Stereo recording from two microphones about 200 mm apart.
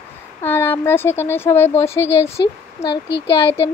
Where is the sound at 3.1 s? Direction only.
60° left (ahead or behind).